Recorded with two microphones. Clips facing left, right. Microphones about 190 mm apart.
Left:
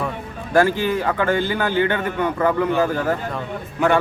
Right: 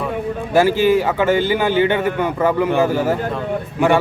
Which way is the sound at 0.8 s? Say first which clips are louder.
Right 7 dB; 90° right.